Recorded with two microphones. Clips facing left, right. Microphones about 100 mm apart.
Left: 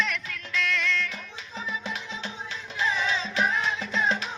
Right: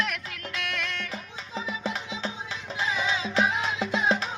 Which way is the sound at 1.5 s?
20° right (ahead or behind).